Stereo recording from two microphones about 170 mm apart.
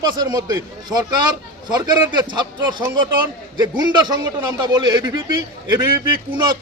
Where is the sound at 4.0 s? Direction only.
25° right (ahead or behind).